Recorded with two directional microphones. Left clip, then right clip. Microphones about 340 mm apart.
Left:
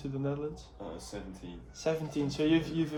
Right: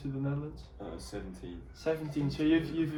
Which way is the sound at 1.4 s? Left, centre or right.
Centre.